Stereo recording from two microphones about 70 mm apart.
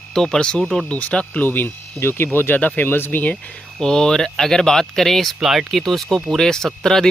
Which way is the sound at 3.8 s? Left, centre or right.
Centre.